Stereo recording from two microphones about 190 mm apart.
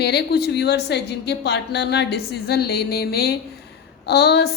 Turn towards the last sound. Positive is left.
turn(degrees=60)  # may be behind; listen again after turning